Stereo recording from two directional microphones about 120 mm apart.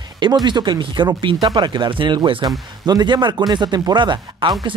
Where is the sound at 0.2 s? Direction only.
35° right (ahead or behind).